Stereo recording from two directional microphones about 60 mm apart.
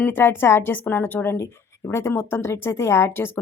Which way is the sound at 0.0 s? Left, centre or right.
Left.